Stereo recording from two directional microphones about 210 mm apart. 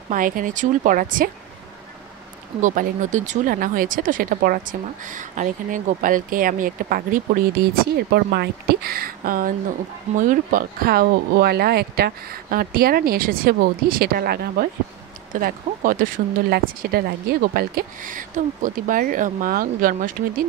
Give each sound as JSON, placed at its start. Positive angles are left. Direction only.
{"t": 0.1, "sound": "speech", "side_deg": -40}
{"t": 2.6, "sound": "speech", "side_deg": -40}
{"t": 8.1, "sound": "speech", "side_deg": -50}